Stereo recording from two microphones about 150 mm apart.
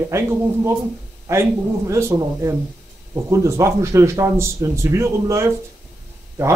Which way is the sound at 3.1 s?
20° right (ahead or behind).